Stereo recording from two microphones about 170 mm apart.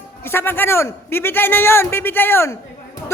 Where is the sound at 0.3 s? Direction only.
15° left (ahead or behind).